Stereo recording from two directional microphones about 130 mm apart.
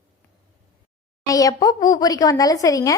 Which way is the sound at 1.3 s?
25° left (ahead or behind).